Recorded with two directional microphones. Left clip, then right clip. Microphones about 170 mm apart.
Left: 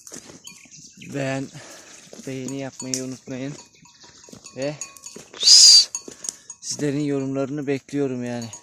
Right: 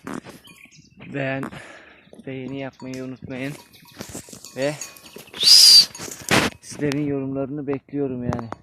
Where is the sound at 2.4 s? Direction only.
5° left (ahead or behind).